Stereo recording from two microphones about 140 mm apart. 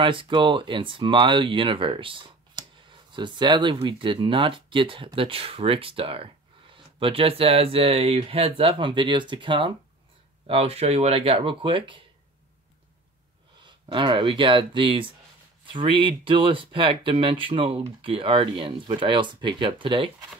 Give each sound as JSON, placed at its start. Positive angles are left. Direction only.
{"t": 0.0, "sound": "speech", "side_deg": -35}
{"t": 10.4, "sound": "speech", "side_deg": -45}
{"t": 13.6, "sound": "speech", "side_deg": -35}